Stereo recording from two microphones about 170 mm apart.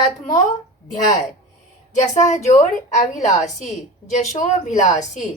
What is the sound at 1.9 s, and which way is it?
A woman's voice, 45° left (ahead or behind).